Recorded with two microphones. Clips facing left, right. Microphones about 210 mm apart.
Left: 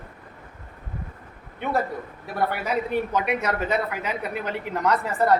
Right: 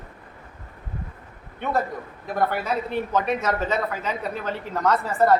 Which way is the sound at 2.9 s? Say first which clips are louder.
Even; 10° left (ahead or behind).